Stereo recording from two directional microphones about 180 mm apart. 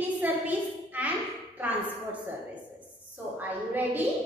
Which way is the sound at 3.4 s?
10° right (ahead or behind).